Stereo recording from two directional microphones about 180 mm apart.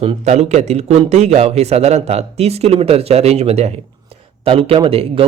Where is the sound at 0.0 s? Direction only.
35° right (ahead or behind).